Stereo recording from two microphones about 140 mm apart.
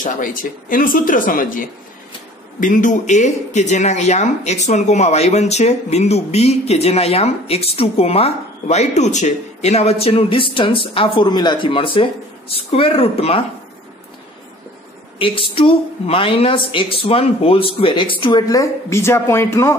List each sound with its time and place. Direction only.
0.0 s speech: 70° left (ahead or behind); by 13.5 s 45° left (ahead or behind)
15.1 s speech: 40° left (ahead or behind)
18.2 s a woman's voice: 30° left (ahead or behind)